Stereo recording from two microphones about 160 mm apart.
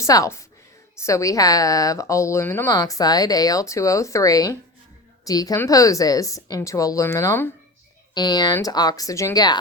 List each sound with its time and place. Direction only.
0.0 s a woman's voice: 20° left (ahead or behind)
8.1 s a woman's voice: 25° left (ahead or behind)